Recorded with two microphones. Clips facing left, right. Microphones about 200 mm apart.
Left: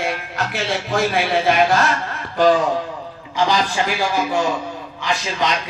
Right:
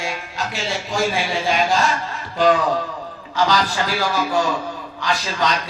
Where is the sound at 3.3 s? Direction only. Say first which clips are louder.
Left 1 dB; 20° left (ahead or behind).